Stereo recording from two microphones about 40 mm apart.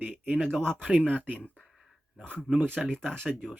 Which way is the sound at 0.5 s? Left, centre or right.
Centre.